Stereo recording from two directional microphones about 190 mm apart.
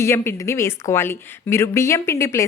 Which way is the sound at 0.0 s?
15° left (ahead or behind).